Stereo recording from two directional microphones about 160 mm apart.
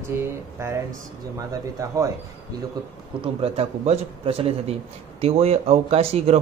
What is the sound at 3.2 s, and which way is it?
A man's voice, 35° right (ahead or behind).